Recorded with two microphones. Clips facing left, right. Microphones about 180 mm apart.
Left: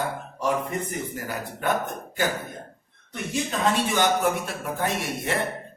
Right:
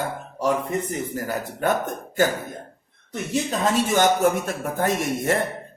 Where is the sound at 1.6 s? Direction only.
45° right (ahead or behind).